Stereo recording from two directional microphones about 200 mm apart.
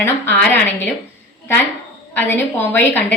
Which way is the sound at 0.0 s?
10° left (ahead or behind).